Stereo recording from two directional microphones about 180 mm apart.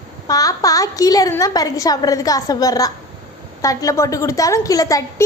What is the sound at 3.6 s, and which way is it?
A woman's voice, 20° left (ahead or behind).